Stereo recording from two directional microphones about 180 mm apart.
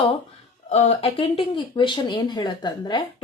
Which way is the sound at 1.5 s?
25° left (ahead or behind).